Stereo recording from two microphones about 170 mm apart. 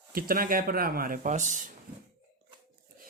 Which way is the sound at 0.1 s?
60° right (ahead or behind).